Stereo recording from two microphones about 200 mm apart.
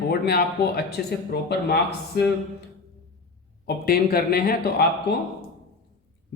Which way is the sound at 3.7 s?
50° left (ahead or behind).